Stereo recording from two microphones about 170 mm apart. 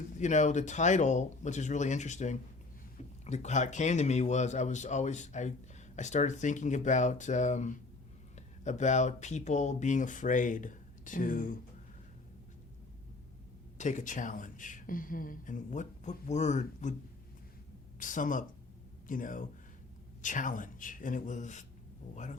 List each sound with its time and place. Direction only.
0.2 s speech: 45° left (ahead or behind)
13.7 s speech: 45° left (ahead or behind)
18.0 s speech: 50° left (ahead or behind)